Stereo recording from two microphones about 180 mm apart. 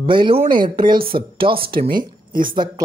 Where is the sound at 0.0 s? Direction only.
30° right (ahead or behind).